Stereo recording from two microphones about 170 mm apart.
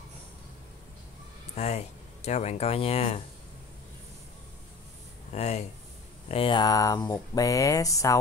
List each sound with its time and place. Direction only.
1.6 s speech: 40° left (ahead or behind)
5.3 s speech: 40° left (ahead or behind); by 8.2 s 20° left (ahead or behind)